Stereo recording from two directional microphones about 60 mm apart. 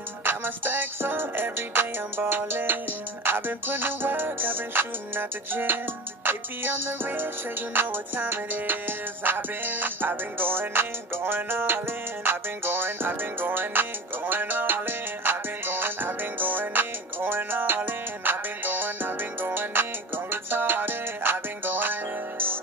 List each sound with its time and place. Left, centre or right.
0.2 s music: right